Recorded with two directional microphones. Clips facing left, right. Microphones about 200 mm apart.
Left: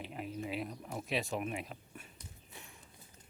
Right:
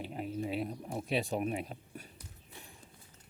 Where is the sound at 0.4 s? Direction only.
30° right (ahead or behind).